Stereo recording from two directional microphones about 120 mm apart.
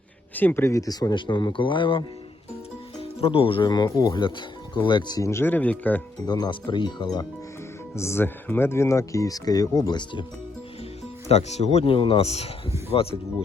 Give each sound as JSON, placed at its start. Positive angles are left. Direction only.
{"t": 0.3, "sound": "speech", "side_deg": 15}
{"t": 3.0, "sound": "speech", "side_deg": 55}
{"t": 5.3, "sound": "speech", "side_deg": 15}
{"t": 6.2, "sound": "speech", "side_deg": 35}
{"t": 7.9, "sound": "speech", "side_deg": 20}
{"t": 11.3, "sound": "speech", "side_deg": 65}